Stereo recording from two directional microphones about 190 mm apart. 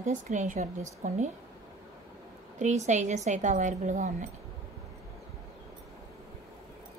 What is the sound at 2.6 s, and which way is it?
A woman's voice, 40° right (ahead or behind).